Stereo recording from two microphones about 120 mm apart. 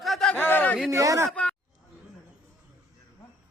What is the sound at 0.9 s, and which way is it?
Speech, 25° right (ahead or behind).